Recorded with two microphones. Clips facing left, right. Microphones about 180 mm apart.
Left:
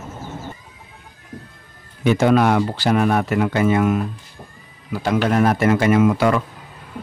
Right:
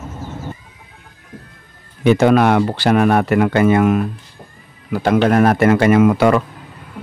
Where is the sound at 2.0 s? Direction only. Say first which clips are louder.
Right 3 dB; 65° right (ahead or behind).